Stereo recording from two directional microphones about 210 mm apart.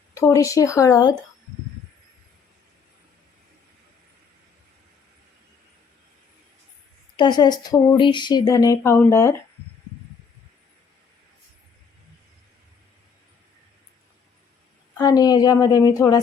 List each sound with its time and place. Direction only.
0.1 s a woman's voice: 15° left (ahead or behind)
7.2 s speech: 20° left (ahead or behind)
14.9 s a woman's voice: 20° left (ahead or behind)